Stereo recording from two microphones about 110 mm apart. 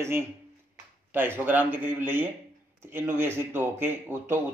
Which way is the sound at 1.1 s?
20° right (ahead or behind).